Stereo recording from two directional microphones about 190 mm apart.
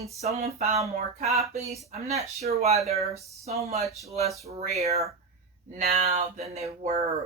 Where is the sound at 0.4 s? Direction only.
35° right (ahead or behind).